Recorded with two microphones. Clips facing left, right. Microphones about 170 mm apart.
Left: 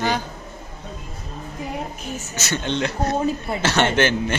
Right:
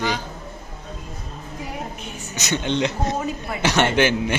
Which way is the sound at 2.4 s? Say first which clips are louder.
Right 2 dB; 15° right (ahead or behind).